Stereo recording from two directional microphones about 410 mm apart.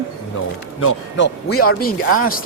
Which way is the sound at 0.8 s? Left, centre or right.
Left.